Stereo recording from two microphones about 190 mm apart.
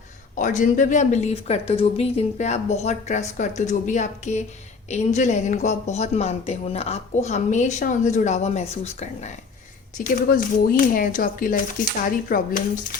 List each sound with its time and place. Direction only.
0.3 s a woman's voice: 40° left (ahead or behind)
10.0 s speech: 45° left (ahead or behind)